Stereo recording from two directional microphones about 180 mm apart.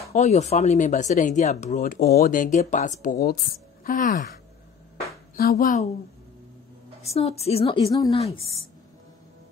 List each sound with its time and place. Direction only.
0.1 s speech: 40° left (ahead or behind)
5.3 s speech: 55° left (ahead or behind)
7.0 s a woman's voice: 35° left (ahead or behind)